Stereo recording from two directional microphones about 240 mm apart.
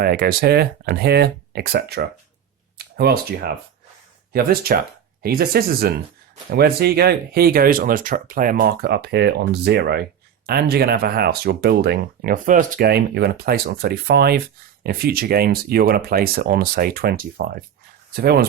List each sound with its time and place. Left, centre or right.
0.0 s speech: right